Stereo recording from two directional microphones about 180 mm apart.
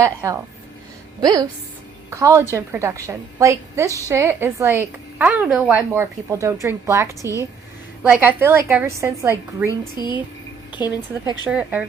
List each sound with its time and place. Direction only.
0.0 s a woman's voice: 15° right (ahead or behind)
9.6 s speech: 25° left (ahead or behind)
11.4 s a woman's voice: 10° right (ahead or behind)